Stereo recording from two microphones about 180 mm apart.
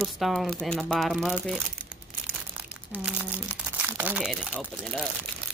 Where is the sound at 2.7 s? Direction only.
10° right (ahead or behind).